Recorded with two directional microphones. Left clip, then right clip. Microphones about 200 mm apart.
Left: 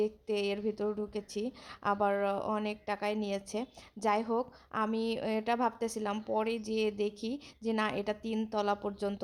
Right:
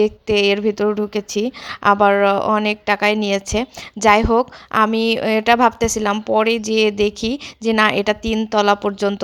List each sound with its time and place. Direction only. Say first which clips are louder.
0.0 s a woman's voice: right 17 dB; 25° right (ahead or behind)